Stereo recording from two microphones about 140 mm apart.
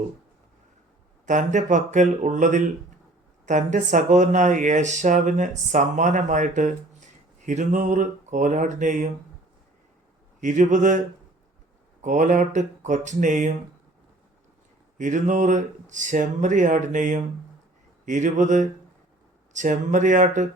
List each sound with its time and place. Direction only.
1.2 s speech: 60° right (ahead or behind)
10.4 s speech: 60° right (ahead or behind)
12.0 s speech: 65° right (ahead or behind)
14.9 s speech: 65° right (ahead or behind)